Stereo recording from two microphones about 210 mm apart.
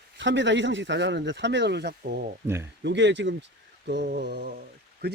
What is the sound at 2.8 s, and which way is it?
Speech, 60° right (ahead or behind).